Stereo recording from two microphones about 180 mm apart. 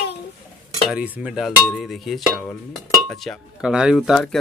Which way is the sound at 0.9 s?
5° right (ahead or behind).